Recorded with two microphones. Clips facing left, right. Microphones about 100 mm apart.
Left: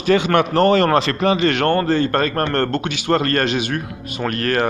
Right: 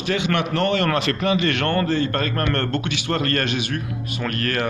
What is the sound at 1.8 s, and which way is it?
Speech, 45° left (ahead or behind).